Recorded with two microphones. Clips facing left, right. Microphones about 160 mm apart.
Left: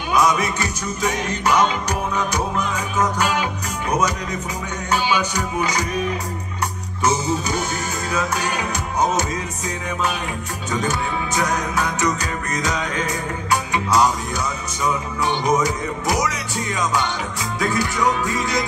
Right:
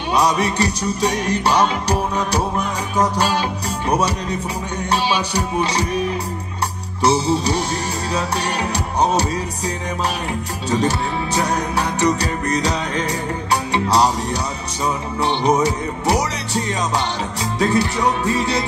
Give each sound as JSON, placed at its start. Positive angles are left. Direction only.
{"t": 0.1, "sound": "music", "side_deg": -35}
{"t": 7.0, "sound": "music", "side_deg": -35}
{"t": 10.7, "sound": "music", "side_deg": -30}